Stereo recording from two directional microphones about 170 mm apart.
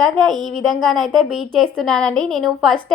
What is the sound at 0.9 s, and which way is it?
A woman's voice, centre (ahead or behind).